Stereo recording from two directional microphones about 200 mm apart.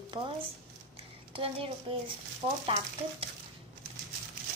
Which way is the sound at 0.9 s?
25° right (ahead or behind).